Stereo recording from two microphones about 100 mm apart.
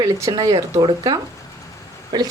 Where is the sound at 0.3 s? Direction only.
45° right (ahead or behind).